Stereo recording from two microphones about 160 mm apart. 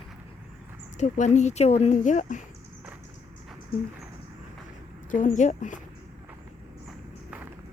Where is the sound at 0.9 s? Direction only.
50° left (ahead or behind).